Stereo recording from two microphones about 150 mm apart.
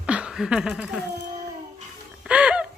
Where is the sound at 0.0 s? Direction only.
5° right (ahead or behind).